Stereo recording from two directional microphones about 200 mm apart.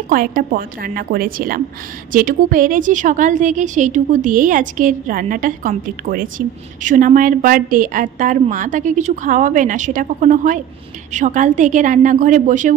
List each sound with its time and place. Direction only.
0.1 s a woman's voice: 45° right (ahead or behind)